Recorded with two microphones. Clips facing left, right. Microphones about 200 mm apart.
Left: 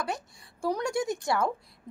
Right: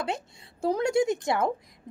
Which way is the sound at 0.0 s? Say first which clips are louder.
Right 2 dB; 25° right (ahead or behind).